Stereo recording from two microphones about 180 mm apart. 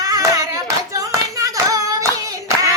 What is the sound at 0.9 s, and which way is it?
Hands, 20° right (ahead or behind).